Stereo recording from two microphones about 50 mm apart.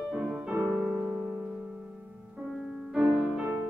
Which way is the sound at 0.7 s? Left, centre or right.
Right.